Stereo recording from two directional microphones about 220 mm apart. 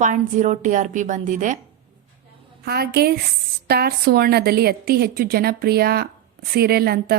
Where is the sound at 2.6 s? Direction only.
45° right (ahead or behind).